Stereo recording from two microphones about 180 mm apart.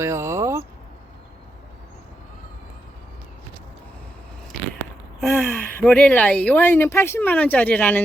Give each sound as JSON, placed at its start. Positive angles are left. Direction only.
{"t": 0.0, "sound": "vehicle", "side_deg": -15}
{"t": 5.2, "sound": "a woman's voice", "side_deg": 0}